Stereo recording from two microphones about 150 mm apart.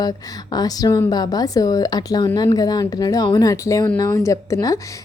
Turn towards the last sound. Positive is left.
turn(degrees=20)  # may be behind; listen again after turning